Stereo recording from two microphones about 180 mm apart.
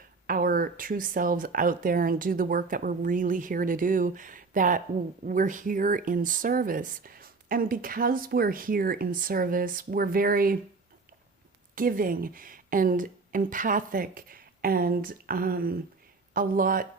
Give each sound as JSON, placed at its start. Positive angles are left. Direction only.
{"t": 0.3, "sound": "speech", "side_deg": -50}
{"t": 11.7, "sound": "speech", "side_deg": -50}